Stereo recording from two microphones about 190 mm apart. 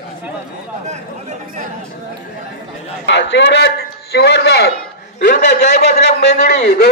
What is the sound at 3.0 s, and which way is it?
A man's voice, 65° left (ahead or behind).